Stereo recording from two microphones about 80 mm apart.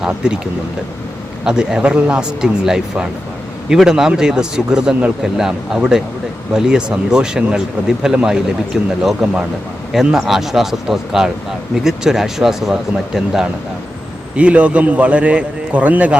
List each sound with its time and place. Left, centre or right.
0.2 s speech: centre
1.5 s speech: centre
14.3 s speech: centre